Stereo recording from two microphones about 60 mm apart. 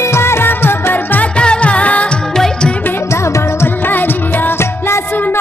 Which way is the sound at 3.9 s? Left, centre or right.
Left.